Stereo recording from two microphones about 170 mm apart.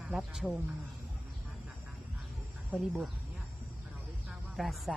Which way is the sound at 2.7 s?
10° right (ahead or behind).